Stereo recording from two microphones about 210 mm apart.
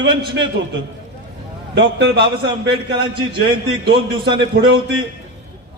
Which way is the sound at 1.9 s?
55° right (ahead or behind).